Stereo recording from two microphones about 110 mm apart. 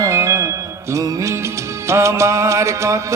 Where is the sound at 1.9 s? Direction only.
25° right (ahead or behind).